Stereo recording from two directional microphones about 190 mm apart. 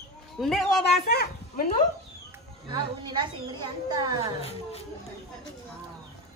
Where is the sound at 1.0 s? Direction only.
55° left (ahead or behind).